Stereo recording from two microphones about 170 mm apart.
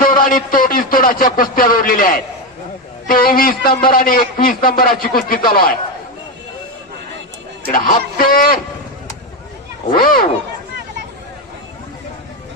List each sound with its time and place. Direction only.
0.0 s a man's voice: 55° left (ahead or behind)
7.7 s a man's voice: 55° left (ahead or behind)
9.9 s a man's voice: 55° left (ahead or behind)